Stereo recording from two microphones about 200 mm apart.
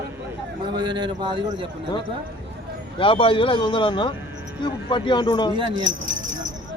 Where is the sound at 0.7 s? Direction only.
20° right (ahead or behind).